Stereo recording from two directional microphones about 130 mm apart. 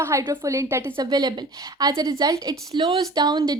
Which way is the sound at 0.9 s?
30° right (ahead or behind).